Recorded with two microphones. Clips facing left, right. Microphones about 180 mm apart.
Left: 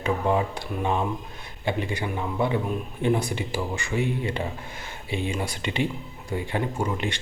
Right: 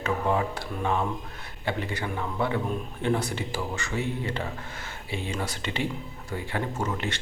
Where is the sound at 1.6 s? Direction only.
15° left (ahead or behind).